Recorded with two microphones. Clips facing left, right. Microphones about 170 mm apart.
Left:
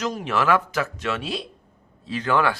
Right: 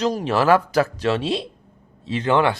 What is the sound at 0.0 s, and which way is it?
Speech, 35° right (ahead or behind).